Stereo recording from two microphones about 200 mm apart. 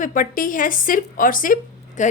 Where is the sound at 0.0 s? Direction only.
40° left (ahead or behind).